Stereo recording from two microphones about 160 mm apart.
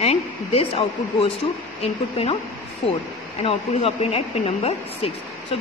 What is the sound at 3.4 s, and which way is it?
A woman's voice, 40° left (ahead or behind).